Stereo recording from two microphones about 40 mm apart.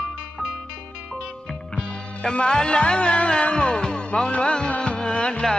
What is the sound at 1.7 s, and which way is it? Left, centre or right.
Music, left.